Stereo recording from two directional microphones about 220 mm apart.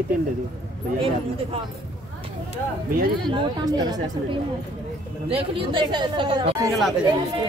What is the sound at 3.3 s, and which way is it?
Speech, 20° right (ahead or behind).